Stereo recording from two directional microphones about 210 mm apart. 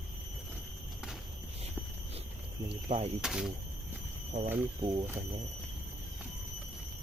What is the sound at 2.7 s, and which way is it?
Speech, 30° right (ahead or behind).